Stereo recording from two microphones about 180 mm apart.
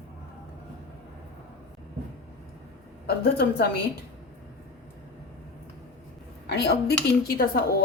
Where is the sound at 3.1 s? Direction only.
60° left (ahead or behind).